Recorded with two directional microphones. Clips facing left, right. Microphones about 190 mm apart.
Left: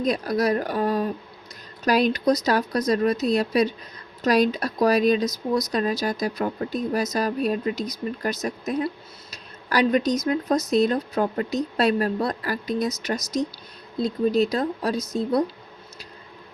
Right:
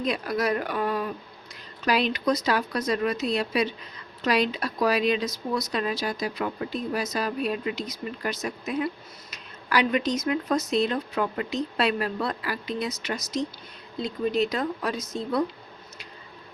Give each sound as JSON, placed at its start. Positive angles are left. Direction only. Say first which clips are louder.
{"t": 0.0, "sound": "speech", "louder": "left 4 dB", "side_deg": 40}